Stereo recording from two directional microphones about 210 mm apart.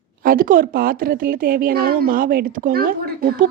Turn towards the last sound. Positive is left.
turn(degrees=-45)  # may be behind; listen again after turning